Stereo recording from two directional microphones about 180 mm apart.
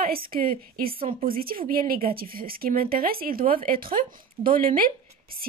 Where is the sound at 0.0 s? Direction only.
55° right (ahead or behind).